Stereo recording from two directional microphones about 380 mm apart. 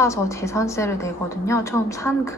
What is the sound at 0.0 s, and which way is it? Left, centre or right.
A woman's voice, centre.